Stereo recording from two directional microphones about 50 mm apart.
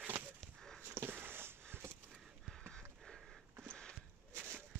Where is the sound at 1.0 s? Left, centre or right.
Right.